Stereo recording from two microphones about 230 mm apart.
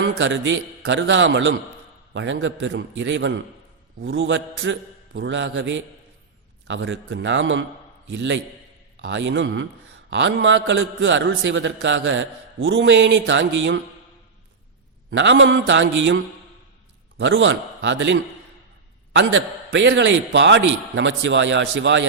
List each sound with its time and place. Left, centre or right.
0.2 s a man's voice: right
15.1 s a man's voice: right
17.2 s a man's voice: right